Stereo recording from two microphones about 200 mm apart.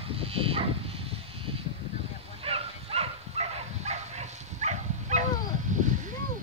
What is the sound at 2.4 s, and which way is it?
Dog, 30° right (ahead or behind).